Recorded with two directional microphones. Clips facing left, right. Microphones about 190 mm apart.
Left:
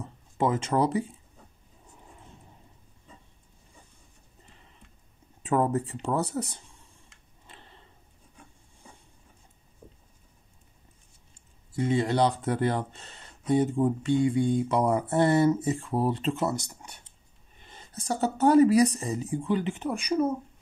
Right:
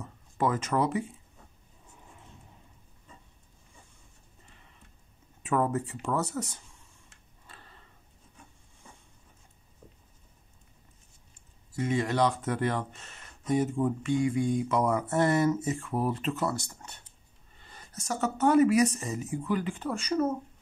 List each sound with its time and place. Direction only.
0.0 s a sound: 25° left (ahead or behind)
5.4 s speech: 35° left (ahead or behind)
7.4 s tick-tock: 20° left (ahead or behind)
11.7 s speech: 30° left (ahead or behind); by 20.3 s 10° left (ahead or behind)